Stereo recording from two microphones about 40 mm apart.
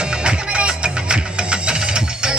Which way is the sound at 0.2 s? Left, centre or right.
Right.